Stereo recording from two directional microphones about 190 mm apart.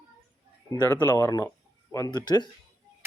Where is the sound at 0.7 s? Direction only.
10° left (ahead or behind).